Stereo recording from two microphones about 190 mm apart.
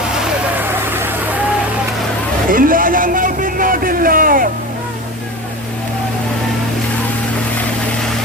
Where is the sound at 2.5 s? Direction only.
45° right (ahead or behind).